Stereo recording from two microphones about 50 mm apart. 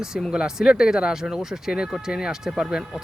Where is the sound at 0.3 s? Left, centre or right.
Centre.